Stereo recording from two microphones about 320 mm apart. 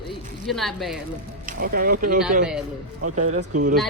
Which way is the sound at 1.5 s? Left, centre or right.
Right.